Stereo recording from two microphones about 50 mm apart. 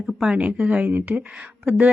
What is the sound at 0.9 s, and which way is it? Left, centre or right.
Speech, right.